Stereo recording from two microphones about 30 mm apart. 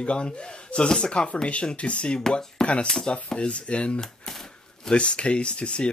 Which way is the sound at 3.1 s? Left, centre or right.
Left.